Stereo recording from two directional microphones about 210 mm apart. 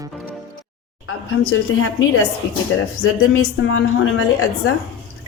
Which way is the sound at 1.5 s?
75° left (ahead or behind).